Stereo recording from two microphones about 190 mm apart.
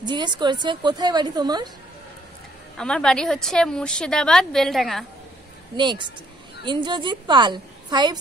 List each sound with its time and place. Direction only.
0.0 s a woman's voice: 25° right (ahead or behind)
2.8 s a woman's voice: 5° left (ahead or behind)
5.8 s a woman's voice: 25° right (ahead or behind)